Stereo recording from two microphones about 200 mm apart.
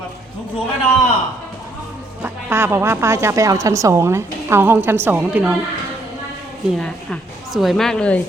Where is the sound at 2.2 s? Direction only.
10° right (ahead or behind).